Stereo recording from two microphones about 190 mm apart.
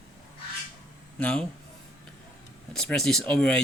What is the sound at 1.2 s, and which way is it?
Speech, 5° left (ahead or behind).